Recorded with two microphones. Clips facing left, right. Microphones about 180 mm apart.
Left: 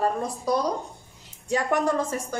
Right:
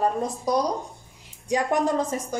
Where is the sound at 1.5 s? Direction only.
15° right (ahead or behind).